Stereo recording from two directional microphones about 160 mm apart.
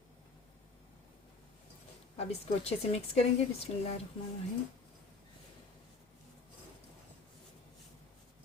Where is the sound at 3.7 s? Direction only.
40° left (ahead or behind).